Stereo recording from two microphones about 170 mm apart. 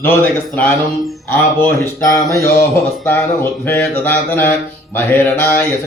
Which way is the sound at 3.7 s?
10° left (ahead or behind).